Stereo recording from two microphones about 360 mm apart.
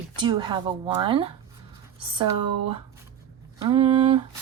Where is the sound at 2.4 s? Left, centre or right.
Right.